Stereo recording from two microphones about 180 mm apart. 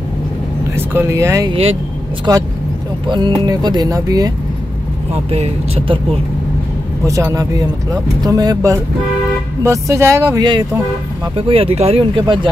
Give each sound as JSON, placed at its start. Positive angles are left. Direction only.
{"t": 0.7, "sound": "speech", "side_deg": -15}
{"t": 1.5, "sound": "speech", "side_deg": -35}
{"t": 2.3, "sound": "speech", "side_deg": -20}
{"t": 5.1, "sound": "speech", "side_deg": -35}
{"t": 7.1, "sound": "speech", "side_deg": -15}
{"t": 11.3, "sound": "speech", "side_deg": -30}